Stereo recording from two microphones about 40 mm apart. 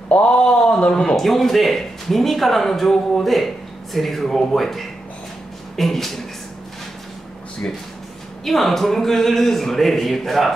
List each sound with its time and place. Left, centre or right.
0.1 s speech: left
1.2 s speech: centre
8.5 s speech: centre